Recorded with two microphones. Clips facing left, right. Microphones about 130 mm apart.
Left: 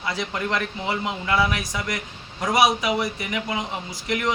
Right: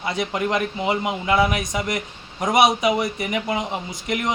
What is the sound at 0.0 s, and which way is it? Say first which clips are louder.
Speech: right 4 dB; 20° right (ahead or behind).